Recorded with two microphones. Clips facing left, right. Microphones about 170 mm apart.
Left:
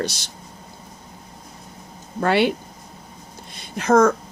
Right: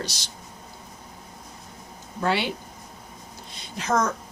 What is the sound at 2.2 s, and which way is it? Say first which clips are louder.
Speech: left 7 dB; 60° left (ahead or behind).